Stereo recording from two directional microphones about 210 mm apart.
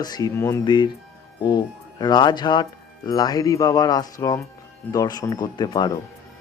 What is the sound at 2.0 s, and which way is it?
Speech, 20° left (ahead or behind).